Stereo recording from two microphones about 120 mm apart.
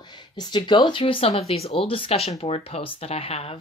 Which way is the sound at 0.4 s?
40° left (ahead or behind).